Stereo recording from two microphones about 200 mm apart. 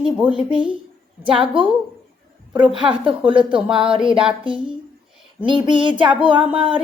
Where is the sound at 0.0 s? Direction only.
5° right (ahead or behind).